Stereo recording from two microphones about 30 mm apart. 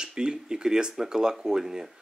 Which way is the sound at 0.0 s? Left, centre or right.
Right.